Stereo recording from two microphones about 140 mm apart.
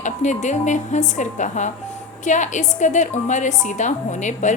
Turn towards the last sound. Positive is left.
turn(degrees=60)  # may be behind; listen again after turning